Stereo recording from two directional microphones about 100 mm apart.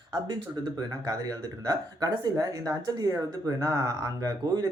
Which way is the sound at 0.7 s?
35° right (ahead or behind).